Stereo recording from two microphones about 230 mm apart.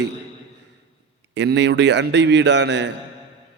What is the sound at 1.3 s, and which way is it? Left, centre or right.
A man's voice, right.